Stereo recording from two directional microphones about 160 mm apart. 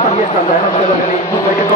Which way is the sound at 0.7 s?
45° left (ahead or behind).